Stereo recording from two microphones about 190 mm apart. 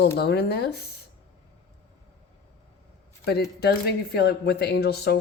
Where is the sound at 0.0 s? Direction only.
60° left (ahead or behind).